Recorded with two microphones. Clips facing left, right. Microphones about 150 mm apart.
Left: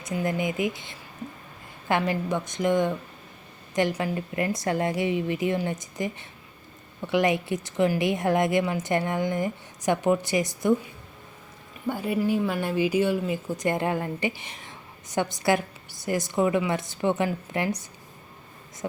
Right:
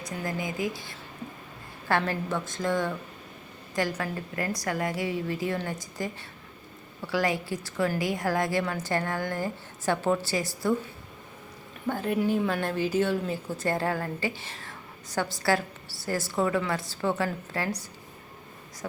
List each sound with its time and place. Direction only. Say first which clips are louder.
0.0 s a woman's voice: left 5 dB; 25° left (ahead or behind)
11.9 s a woman's voice: left 1 dB; 10° left (ahead or behind)